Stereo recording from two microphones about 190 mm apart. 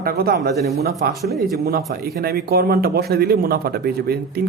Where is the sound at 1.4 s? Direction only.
55° right (ahead or behind).